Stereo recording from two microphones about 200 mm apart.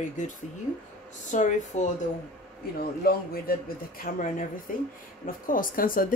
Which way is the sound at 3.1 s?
50° left (ahead or behind).